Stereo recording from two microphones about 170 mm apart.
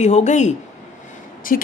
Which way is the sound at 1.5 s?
55° left (ahead or behind).